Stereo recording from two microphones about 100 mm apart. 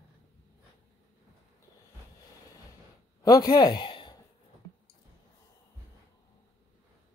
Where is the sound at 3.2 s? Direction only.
40° left (ahead or behind).